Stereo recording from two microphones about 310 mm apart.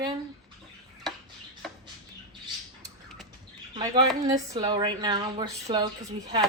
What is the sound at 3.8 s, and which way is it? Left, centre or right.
Speech, centre.